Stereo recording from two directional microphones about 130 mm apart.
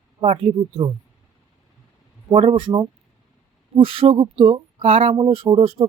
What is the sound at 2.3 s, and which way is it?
Speech, 45° right (ahead or behind).